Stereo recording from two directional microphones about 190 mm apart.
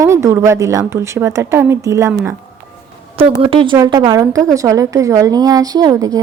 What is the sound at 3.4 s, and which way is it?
A woman's voice, 30° right (ahead or behind).